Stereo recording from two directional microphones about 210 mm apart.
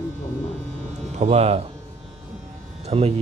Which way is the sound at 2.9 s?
30° right (ahead or behind).